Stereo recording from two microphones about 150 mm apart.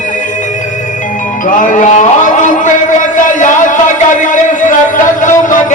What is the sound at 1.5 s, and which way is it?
Music, 65° left (ahead or behind).